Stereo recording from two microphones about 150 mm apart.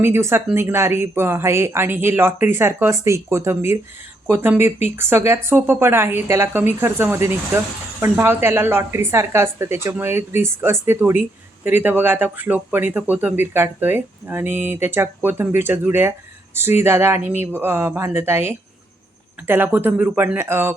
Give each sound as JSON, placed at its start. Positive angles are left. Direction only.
{"t": 0.0, "sound": "speech", "side_deg": -15}